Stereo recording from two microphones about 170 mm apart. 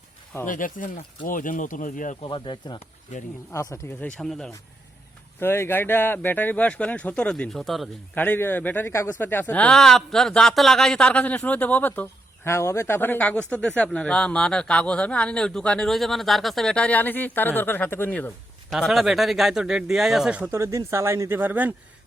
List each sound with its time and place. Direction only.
0.4 s speech: 50° left (ahead or behind)
2.2 s speech: 30° left (ahead or behind)
3.5 s speech: 20° left (ahead or behind)
4.2 s speech: centre (ahead or behind)
5.4 s speech: 15° left (ahead or behind)
8.2 s speech: 10° left (ahead or behind)
18.7 s speech: centre (ahead or behind)